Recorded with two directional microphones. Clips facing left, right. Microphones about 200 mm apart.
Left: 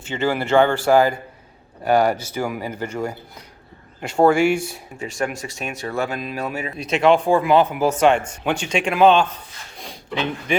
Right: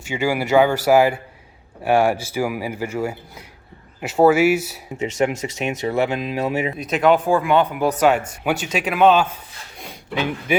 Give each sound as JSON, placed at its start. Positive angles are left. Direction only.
{"t": 0.0, "sound": "speech", "side_deg": -10}
{"t": 4.9, "sound": "speech", "side_deg": -20}
{"t": 6.7, "sound": "speech", "side_deg": 0}
{"t": 9.7, "sound": "a sound", "side_deg": -10}